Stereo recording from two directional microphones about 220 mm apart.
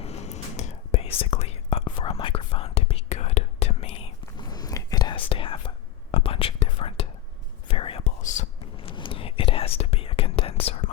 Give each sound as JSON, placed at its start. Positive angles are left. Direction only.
{"t": 0.0, "sound": "whispering", "side_deg": 30}